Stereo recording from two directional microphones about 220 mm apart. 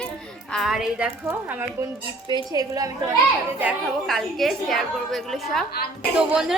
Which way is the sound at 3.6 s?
Centre (ahead or behind).